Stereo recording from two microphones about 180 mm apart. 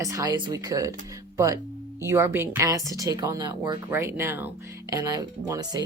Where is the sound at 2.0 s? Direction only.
15° right (ahead or behind).